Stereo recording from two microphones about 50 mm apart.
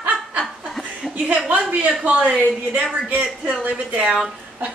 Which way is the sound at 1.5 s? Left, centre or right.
Right.